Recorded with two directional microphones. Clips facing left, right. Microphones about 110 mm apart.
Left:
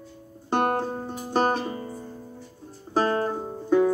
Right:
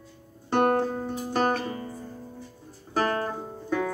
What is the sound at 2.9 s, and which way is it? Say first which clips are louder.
Music: left 3 dB; 25° left (ahead or behind).